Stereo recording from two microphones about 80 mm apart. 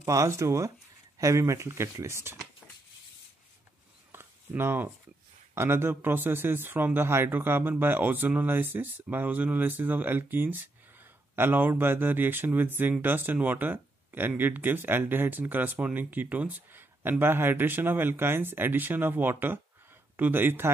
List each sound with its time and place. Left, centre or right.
0.0 s speech: right
4.1 s a sound: right
5.5 s speech: right